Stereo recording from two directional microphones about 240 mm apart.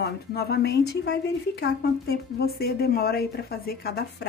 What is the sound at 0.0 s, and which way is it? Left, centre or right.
A woman's voice, left.